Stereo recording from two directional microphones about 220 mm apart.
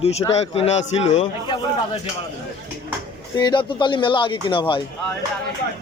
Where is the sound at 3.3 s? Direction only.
20° left (ahead or behind).